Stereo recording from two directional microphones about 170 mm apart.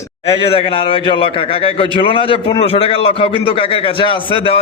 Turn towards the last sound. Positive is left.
turn(degrees=30)  # may be behind; listen again after turning